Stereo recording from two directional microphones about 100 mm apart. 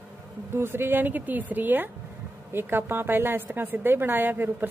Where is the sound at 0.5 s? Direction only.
25° right (ahead or behind).